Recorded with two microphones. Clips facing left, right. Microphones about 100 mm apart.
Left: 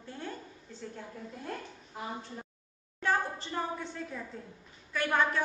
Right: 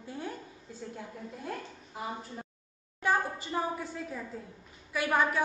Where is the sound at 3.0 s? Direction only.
10° right (ahead or behind).